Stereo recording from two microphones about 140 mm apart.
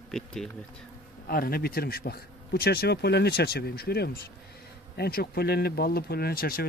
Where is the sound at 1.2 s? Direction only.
90° left.